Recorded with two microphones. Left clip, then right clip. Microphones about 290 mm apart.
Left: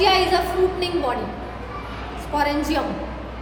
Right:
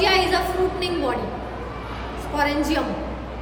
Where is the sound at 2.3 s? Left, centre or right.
Centre.